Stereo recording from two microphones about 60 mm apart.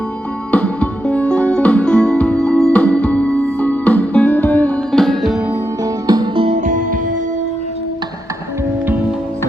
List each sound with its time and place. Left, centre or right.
0.5 s music: left
2.7 s music: left
4.9 s music: centre
5.8 s music: right